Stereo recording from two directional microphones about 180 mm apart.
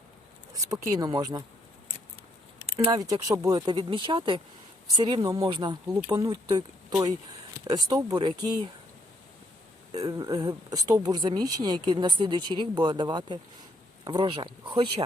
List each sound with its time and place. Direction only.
0.5 s speech: 20° right (ahead or behind)
3.1 s speech: 20° right (ahead or behind)
9.9 s speech: 20° right (ahead or behind)